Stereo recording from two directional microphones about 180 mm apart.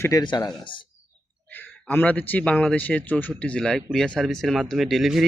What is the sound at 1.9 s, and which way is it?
A man's voice, 10° left (ahead or behind).